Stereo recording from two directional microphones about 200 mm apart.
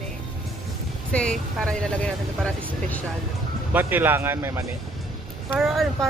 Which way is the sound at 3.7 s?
10° right (ahead or behind).